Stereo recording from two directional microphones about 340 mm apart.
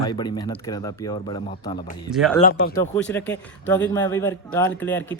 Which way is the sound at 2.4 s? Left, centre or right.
Left.